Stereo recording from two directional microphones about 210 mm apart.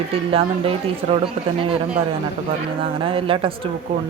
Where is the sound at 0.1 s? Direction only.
25° right (ahead or behind).